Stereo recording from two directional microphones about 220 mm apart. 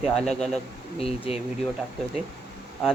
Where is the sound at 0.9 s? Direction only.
25° left (ahead or behind).